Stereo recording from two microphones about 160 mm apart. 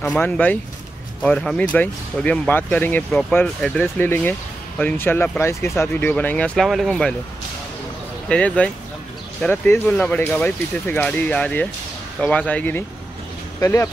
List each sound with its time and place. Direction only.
0.0 s speech: 5° left (ahead or behind)
8.3 s speech: 5° left (ahead or behind)